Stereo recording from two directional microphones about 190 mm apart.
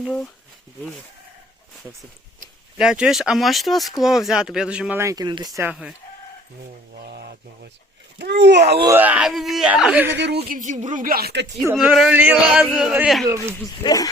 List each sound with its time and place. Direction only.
0.0 s speech: 5° left (ahead or behind)
2.7 s speech: 5° right (ahead or behind)
7.1 s speech: 55° right (ahead or behind)
8.8 s speech: 10° right (ahead or behind)
10.5 s speech: 40° right (ahead or behind)
11.8 s a sound: 5° right (ahead or behind)
12.9 s speech: 5° right (ahead or behind)
13.2 s a sound: 15° right (ahead or behind)
13.8 s speech: 20° left (ahead or behind)